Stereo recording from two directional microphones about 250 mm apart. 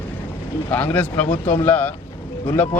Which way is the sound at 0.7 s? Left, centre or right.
Centre.